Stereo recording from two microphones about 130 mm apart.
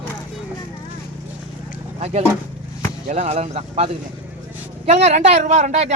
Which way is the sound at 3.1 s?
60° right (ahead or behind).